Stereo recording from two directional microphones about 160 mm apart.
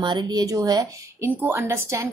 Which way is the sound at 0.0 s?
25° right (ahead or behind).